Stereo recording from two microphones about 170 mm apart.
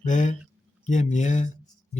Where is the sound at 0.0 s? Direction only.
45° left (ahead or behind).